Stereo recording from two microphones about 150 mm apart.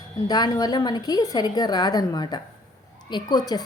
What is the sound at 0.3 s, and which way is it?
A woman's voice, 25° left (ahead or behind).